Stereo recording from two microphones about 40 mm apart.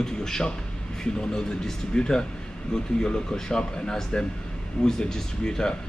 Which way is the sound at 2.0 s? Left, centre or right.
Left.